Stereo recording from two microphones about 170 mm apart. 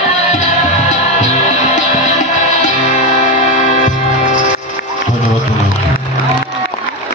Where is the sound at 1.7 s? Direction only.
45° left (ahead or behind).